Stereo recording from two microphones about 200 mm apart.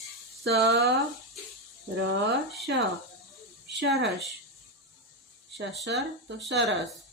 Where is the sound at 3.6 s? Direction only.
60° right (ahead or behind).